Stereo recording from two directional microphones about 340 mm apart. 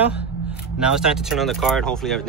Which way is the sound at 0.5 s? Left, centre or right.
Centre.